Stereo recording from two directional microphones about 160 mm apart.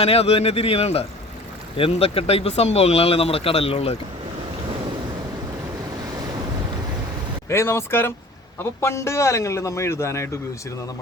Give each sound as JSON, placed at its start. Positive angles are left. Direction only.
{"t": 0.0, "sound": "speech", "side_deg": 40}
{"t": 7.5, "sound": "a man's voice", "side_deg": 15}